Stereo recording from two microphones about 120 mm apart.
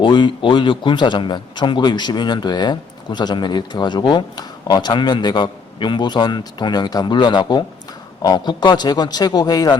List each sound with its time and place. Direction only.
0.0 s a man's voice: 40° left (ahead or behind)